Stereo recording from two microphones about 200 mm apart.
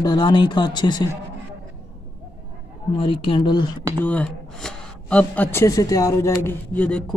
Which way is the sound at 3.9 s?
5° left (ahead or behind).